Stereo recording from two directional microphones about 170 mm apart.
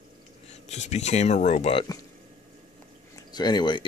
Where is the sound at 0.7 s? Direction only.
40° left (ahead or behind).